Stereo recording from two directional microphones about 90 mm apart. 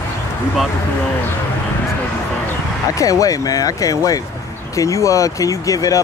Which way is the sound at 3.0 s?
40° left (ahead or behind).